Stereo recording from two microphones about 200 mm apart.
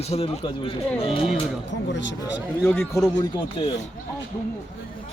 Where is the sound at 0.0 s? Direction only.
30° left (ahead or behind).